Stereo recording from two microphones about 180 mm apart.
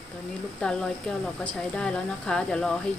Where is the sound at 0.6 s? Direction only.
5° left (ahead or behind).